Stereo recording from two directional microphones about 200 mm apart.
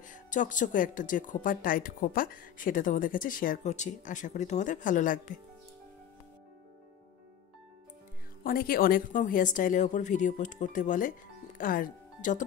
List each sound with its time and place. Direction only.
0.0 s speech: 40° left (ahead or behind)
8.5 s speech: 45° left (ahead or behind)